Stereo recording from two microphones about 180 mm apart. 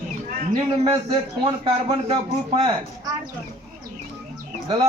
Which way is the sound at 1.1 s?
25° right (ahead or behind).